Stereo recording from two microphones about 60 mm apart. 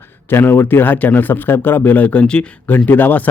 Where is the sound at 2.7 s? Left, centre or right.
Left.